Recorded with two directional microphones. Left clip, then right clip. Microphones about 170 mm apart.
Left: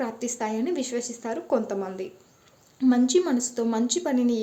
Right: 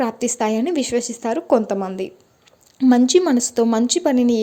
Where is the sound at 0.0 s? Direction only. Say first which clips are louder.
Right 9 dB; 45° right (ahead or behind).